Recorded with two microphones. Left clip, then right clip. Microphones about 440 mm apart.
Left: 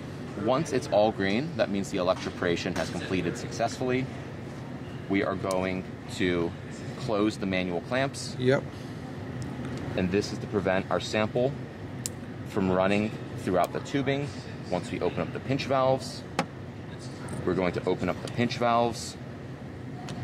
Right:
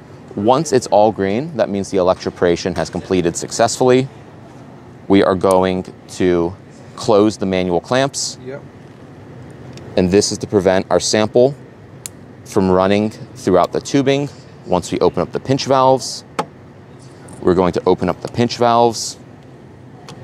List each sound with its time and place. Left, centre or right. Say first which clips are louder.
0.5 s speech: right 13 dB; right
5.1 s speech: right 16 dB; right
7.0 s speech: right 15 dB; right
9.9 s speech: right 15 dB; right
12.5 s speech: right 12 dB; right
17.5 s speech: right 14 dB; right